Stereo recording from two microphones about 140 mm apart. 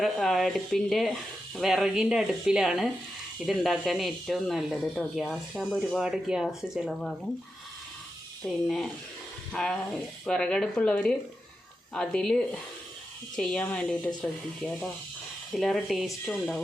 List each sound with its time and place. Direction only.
0.0 s speech: centre (ahead or behind)
8.4 s speech: 5° left (ahead or behind)